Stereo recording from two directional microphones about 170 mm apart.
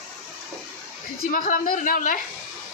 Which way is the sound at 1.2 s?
55° left (ahead or behind).